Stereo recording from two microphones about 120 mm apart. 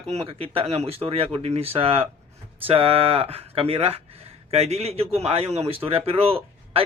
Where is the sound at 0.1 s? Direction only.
55° right (ahead or behind).